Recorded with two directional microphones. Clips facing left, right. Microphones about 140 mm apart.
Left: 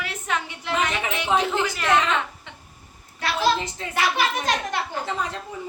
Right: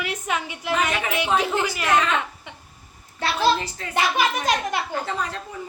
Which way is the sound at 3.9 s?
15° right (ahead or behind).